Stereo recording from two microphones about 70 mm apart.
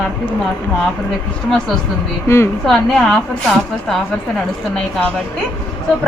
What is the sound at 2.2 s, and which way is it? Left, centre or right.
Speech, left.